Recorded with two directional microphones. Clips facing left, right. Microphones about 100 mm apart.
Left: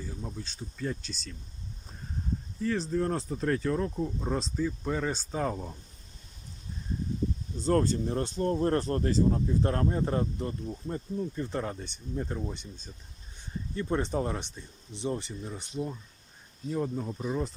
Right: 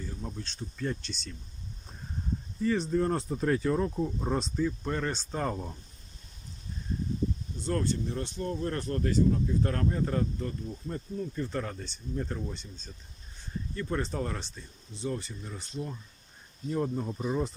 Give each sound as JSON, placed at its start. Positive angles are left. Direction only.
{"t": 0.0, "sound": "speech", "side_deg": 5}
{"t": 2.6, "sound": "speech", "side_deg": 0}
{"t": 7.6, "sound": "speech", "side_deg": 40}
{"t": 13.7, "sound": "speech", "side_deg": 20}
{"t": 16.6, "sound": "speech", "side_deg": 0}